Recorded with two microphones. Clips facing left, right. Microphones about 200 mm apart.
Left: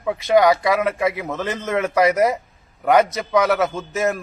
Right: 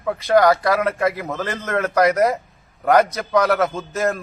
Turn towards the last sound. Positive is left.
turn(degrees=5)  # may be behind; listen again after turning